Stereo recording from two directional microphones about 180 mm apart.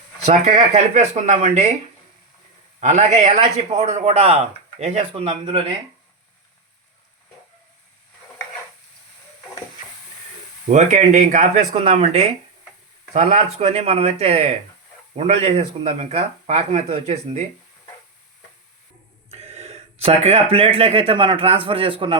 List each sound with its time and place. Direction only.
0.3 s speech: 40° right (ahead or behind)
2.8 s speech: 40° right (ahead or behind)
10.7 s speech: 40° right (ahead or behind)
11.8 s speech: 35° right (ahead or behind)
19.3 s speech: 35° right (ahead or behind)